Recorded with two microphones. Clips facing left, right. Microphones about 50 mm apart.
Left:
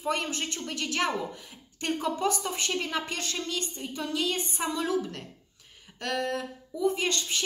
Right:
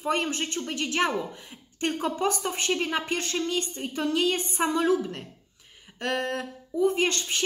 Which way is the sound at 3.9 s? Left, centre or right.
Right.